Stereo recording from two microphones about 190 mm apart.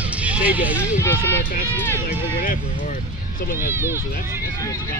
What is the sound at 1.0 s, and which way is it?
Speech, 10° left (ahead or behind).